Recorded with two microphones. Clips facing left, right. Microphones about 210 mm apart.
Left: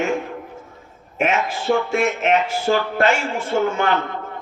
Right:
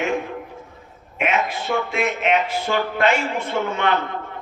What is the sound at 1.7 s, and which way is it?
Speech, 45° left (ahead or behind).